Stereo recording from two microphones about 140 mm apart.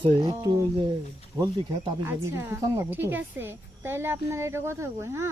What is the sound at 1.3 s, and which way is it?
Speech, 30° right (ahead or behind).